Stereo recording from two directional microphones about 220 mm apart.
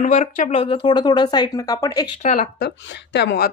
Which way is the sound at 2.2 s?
40° left (ahead or behind).